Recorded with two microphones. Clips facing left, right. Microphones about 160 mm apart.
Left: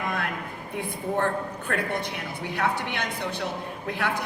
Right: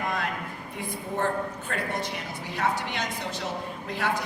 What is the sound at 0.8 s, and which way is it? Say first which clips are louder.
A woman's voice: left 3 dB; 60° left (ahead or behind).